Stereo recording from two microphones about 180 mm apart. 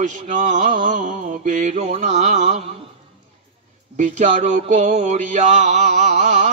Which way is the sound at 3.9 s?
40° right (ahead or behind).